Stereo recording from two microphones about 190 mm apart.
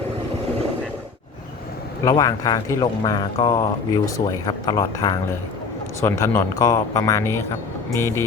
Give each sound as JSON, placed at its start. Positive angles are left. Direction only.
{"t": 2.0, "sound": "a man's voice", "side_deg": 20}